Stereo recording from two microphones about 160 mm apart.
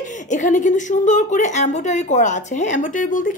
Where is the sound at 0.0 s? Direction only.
50° left (ahead or behind).